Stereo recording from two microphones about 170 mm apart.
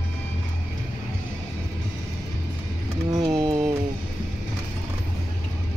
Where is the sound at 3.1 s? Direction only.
25° right (ahead or behind).